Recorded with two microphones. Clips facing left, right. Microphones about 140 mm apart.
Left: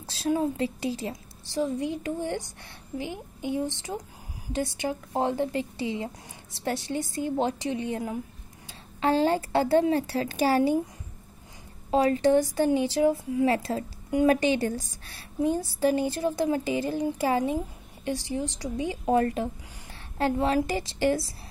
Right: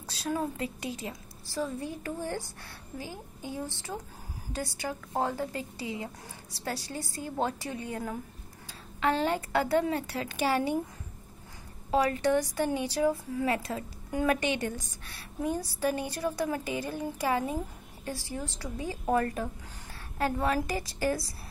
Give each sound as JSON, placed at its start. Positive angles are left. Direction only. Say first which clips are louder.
{"t": 0.1, "sound": "a woman's voice", "louder": "left 6 dB", "side_deg": 30}
{"t": 9.0, "sound": "a woman's voice", "louder": "left 5 dB", "side_deg": 35}
{"t": 11.9, "sound": "a woman's voice", "louder": "left 5 dB", "side_deg": 30}